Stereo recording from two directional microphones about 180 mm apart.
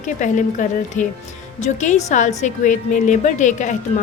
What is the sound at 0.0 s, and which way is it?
A woman's voice, 45° left (ahead or behind).